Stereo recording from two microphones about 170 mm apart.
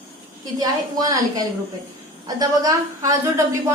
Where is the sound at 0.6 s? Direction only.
20° right (ahead or behind).